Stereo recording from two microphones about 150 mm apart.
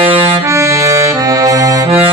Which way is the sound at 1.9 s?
40° right (ahead or behind).